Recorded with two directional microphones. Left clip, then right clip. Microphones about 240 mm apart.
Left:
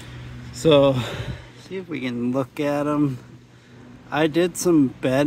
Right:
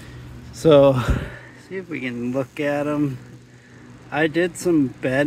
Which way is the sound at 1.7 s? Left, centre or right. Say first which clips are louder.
Even; centre.